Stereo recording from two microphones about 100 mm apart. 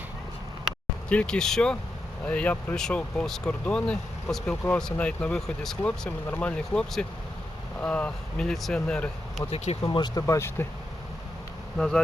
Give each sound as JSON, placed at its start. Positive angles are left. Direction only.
{"t": 1.1, "sound": "speech", "side_deg": 10}
{"t": 9.8, "sound": "speech", "side_deg": 45}
{"t": 10.2, "sound": "speech", "side_deg": 25}
{"t": 11.8, "sound": "speech", "side_deg": 5}